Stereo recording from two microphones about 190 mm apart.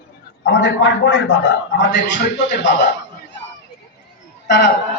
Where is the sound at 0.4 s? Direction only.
85° left.